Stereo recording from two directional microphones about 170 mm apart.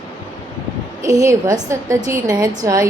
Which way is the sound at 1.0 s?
20° right (ahead or behind).